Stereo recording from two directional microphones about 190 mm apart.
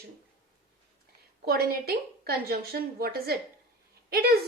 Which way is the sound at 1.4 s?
55° right (ahead or behind).